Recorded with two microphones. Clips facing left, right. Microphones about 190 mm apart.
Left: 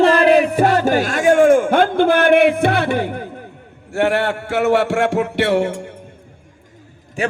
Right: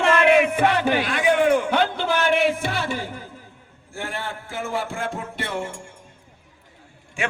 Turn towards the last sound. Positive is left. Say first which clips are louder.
# left 7 dB
turn(degrees=40)  # may be behind; listen again after turning